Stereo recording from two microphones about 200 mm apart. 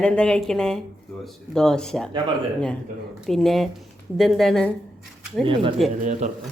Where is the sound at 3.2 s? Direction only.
Centre (ahead or behind).